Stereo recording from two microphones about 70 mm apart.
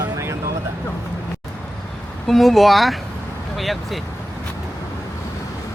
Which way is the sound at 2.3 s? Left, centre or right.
Centre.